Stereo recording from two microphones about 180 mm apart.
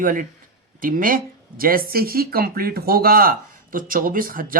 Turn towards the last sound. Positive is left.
turn(degrees=-50)  # may be behind; listen again after turning